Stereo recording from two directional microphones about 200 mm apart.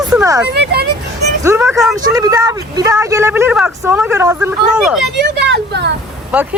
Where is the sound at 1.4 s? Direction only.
15° right (ahead or behind).